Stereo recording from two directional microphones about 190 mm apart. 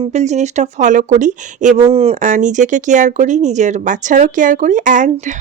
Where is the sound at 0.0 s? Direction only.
35° right (ahead or behind).